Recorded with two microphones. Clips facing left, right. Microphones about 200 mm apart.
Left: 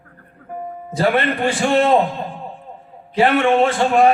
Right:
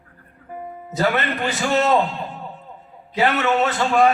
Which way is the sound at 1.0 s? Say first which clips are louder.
Left 4 dB; 30° left (ahead or behind).